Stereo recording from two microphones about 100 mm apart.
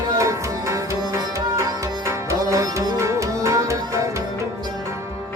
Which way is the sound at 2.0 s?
30° right (ahead or behind).